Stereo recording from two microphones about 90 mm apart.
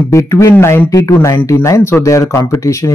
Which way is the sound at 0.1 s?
35° left (ahead or behind).